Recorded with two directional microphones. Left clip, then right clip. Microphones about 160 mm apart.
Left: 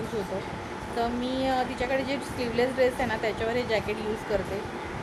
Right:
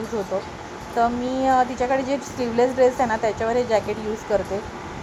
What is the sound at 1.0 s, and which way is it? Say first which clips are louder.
Speech: right 8 dB; 10° right (ahead or behind).